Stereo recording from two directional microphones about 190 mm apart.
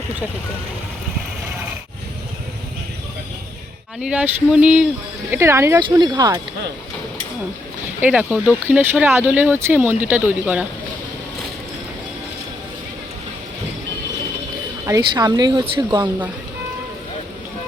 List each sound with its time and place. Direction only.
4.0 s speech: 5° right (ahead or behind)
8.0 s speech: 10° right (ahead or behind)
14.8 s speech: 20° right (ahead or behind)